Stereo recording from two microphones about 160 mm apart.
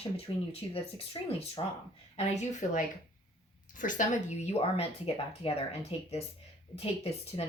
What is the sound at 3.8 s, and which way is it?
Speech, 55° left (ahead or behind).